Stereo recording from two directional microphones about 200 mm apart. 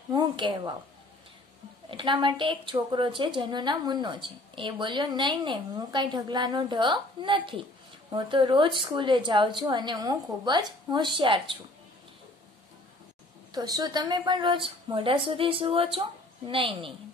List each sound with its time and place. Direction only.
0.1 s a woman's voice: 20° right (ahead or behind)
1.9 s a woman's voice: 25° right (ahead or behind)
13.5 s a woman's voice: 20° right (ahead or behind)